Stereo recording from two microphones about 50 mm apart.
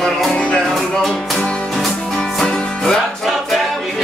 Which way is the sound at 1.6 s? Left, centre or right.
Centre.